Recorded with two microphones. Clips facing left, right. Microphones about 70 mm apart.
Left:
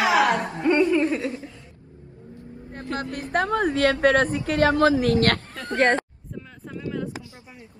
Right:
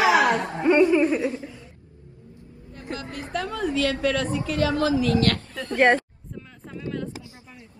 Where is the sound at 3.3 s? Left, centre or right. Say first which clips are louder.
Left 4 dB; left.